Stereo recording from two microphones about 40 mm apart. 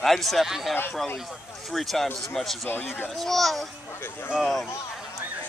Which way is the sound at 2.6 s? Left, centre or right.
Left.